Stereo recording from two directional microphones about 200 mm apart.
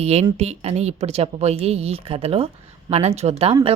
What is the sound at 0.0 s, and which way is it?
A woman's voice, 30° right (ahead or behind).